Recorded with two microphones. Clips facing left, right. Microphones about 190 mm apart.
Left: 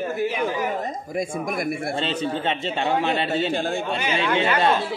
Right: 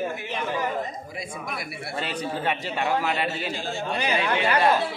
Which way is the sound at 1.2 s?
50° left (ahead or behind).